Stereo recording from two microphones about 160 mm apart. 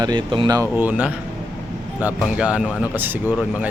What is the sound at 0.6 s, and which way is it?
Speech, 10° right (ahead or behind).